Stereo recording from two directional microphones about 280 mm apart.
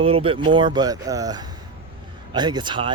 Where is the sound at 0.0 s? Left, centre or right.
Centre.